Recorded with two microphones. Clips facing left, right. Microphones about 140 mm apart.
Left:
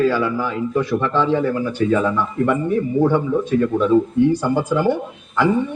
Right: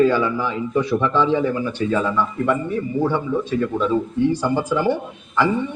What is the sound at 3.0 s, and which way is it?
Speech, 10° left (ahead or behind).